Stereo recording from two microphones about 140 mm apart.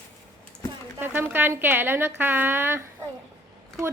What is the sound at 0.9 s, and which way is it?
A woman's voice, 15° right (ahead or behind).